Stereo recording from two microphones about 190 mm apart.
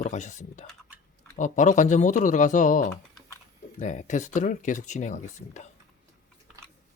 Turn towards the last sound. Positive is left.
turn(degrees=40)  # may be behind; listen again after turning